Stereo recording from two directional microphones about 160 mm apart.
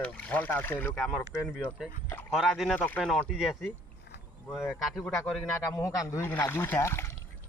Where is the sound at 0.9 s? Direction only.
Centre (ahead or behind).